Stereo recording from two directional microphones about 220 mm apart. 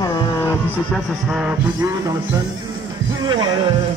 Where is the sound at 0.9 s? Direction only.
5° right (ahead or behind).